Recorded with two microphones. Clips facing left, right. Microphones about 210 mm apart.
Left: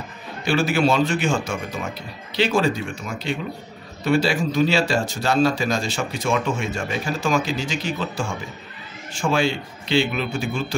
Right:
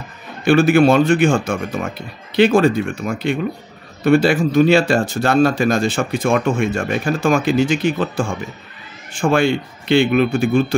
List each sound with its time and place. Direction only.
0.5 s speech: 55° right (ahead or behind)